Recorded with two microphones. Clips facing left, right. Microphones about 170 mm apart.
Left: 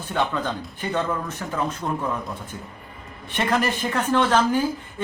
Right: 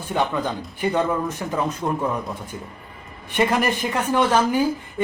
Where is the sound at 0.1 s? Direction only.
10° right (ahead or behind).